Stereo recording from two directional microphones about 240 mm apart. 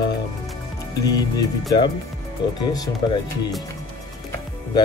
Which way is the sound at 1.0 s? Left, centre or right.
Centre.